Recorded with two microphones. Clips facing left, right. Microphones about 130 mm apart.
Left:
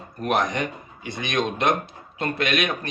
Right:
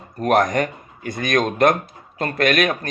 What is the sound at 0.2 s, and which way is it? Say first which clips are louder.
A man's voice: right 6 dB; 45° right (ahead or behind).